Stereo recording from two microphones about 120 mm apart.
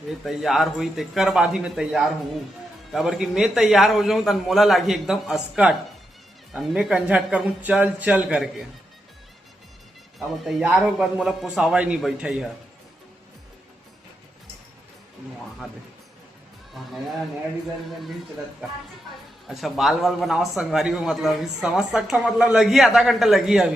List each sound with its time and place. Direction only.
0.3 s a man's voice: centre (ahead or behind)
10.6 s a man's voice: 10° right (ahead or behind)
19.5 s a man's voice: centre (ahead or behind)